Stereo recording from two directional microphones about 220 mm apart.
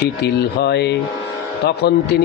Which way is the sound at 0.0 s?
50° left (ahead or behind).